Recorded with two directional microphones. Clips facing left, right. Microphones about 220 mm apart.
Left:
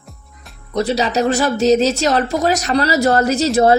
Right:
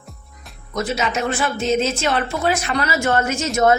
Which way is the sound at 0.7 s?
35° left (ahead or behind).